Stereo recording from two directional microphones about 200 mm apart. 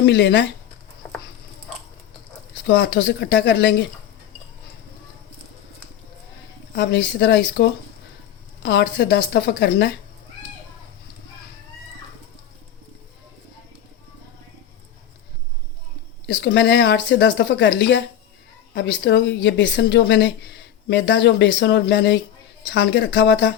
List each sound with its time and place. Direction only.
0.0 s speech: 60° left (ahead or behind)
2.6 s speech: 60° left (ahead or behind)
6.7 s speech: 60° left (ahead or behind)
16.2 s speech: 55° left (ahead or behind)